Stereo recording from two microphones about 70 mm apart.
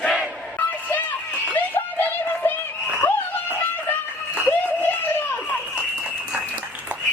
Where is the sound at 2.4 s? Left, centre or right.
Left.